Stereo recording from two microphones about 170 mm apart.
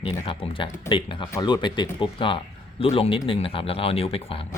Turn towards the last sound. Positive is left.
turn(degrees=35)  # may be behind; listen again after turning